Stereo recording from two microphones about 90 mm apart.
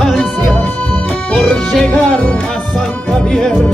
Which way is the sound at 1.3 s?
10° left (ahead or behind).